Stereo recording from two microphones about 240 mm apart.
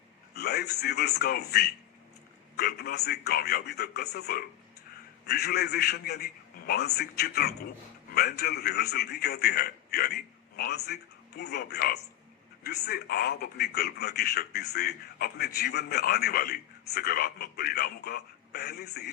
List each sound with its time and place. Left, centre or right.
0.3 s a man's voice: left